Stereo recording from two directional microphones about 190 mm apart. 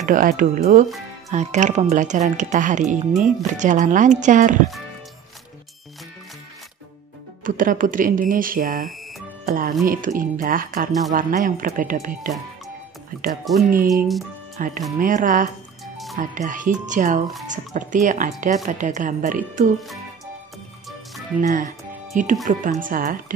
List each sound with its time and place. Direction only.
0.0 s speech: 45° right (ahead or behind)
7.4 s speech: 45° right (ahead or behind)
13.5 s speech: centre (ahead or behind)
14.6 s speech: 45° right (ahead or behind)
15.8 s music: centre (ahead or behind)
16.2 s speech: 45° right (ahead or behind)
21.4 s speech: 45° right (ahead or behind)